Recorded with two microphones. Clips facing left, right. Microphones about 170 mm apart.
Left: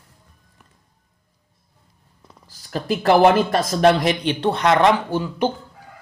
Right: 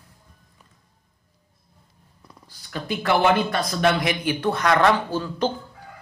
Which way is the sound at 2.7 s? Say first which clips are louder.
Left 6 dB; 35° left (ahead or behind).